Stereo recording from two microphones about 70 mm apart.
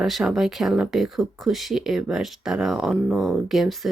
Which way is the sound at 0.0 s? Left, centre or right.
Centre.